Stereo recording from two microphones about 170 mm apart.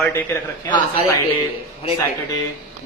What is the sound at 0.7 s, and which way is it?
Speech, 25° left (ahead or behind).